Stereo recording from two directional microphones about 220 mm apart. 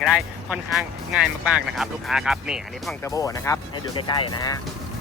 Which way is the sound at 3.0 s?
15° left (ahead or behind).